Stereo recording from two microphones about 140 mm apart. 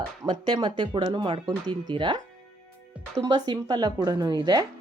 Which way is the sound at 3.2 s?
30° right (ahead or behind).